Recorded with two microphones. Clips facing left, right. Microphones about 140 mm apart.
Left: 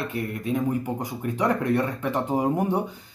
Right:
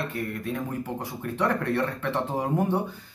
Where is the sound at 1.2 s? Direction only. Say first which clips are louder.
Left 2 dB; 15° left (ahead or behind).